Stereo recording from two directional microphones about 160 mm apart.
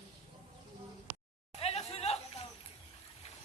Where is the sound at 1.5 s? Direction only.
40° left (ahead or behind).